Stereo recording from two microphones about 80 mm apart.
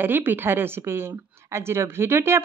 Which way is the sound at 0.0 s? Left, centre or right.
Right.